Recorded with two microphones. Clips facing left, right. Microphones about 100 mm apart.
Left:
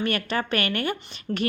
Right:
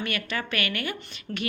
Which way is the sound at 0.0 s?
35° left (ahead or behind).